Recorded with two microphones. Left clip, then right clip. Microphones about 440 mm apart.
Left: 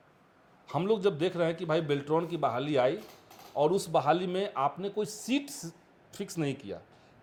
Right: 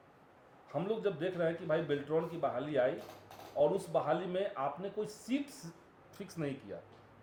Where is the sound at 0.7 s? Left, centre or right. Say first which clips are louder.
Left 7 dB; left.